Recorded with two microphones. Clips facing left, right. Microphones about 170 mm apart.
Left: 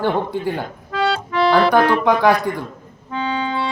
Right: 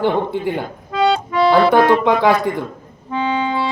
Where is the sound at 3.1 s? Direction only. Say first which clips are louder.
Right 3 dB; 15° right (ahead or behind).